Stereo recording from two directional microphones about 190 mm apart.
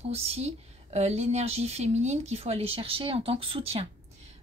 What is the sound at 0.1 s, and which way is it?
Speech, 30° right (ahead or behind).